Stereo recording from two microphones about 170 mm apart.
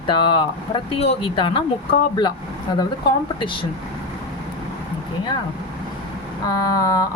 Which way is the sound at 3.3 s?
30° left (ahead or behind).